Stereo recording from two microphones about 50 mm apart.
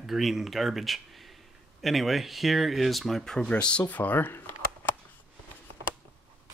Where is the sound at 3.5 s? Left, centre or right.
Left.